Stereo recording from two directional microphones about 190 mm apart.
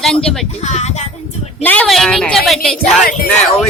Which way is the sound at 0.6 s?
35° left (ahead or behind).